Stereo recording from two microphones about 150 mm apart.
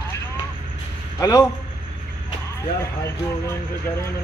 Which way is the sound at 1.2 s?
25° left (ahead or behind).